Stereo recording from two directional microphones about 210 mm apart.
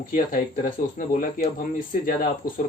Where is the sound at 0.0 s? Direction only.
40° left (ahead or behind).